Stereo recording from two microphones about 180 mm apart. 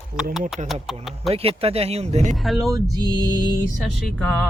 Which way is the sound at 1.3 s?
35° right (ahead or behind).